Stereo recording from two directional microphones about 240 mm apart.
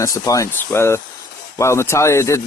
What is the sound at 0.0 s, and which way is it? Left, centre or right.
Speech, centre.